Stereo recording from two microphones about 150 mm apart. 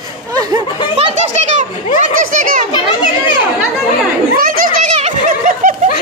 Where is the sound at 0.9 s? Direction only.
45° right (ahead or behind).